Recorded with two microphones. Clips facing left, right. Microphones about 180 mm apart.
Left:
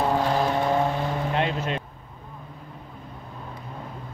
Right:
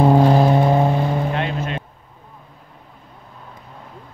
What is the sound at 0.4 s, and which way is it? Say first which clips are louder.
Vehicle: right 7 dB; 10° right (ahead or behind).